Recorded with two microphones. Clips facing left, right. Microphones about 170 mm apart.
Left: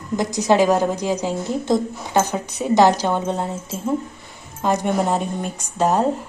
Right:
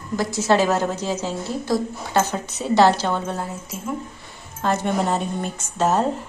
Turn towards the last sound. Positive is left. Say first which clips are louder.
# left 1 dB
turn(degrees=10)  # may be behind; listen again after turning